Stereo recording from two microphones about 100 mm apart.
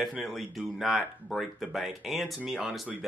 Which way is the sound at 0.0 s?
Centre (ahead or behind).